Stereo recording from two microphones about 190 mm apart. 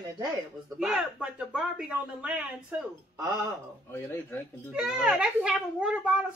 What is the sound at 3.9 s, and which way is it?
Speech, 10° left (ahead or behind).